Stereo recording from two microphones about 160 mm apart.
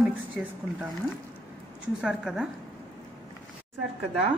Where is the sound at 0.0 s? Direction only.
10° right (ahead or behind).